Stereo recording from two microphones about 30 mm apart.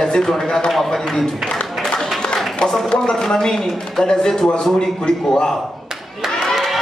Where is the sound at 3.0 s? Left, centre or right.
Centre.